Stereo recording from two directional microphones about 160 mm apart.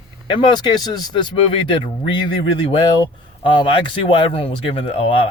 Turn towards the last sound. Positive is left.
turn(degrees=35)  # may be behind; listen again after turning